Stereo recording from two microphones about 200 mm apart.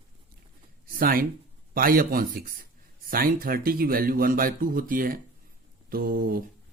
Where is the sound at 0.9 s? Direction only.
45° right (ahead or behind).